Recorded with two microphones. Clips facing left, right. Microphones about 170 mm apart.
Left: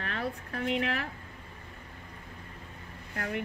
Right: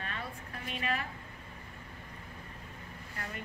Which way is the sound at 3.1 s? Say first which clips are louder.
Left 9 dB; 70° left (ahead or behind).